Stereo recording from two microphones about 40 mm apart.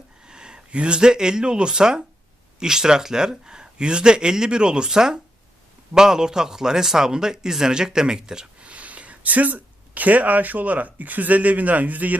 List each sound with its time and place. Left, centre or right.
0.3 s speech: right
8.6 s speech: right